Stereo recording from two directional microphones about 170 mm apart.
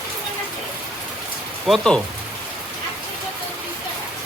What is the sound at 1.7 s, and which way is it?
Speech, 5° left (ahead or behind).